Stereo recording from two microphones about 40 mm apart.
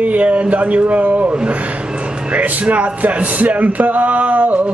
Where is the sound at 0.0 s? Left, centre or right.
Right.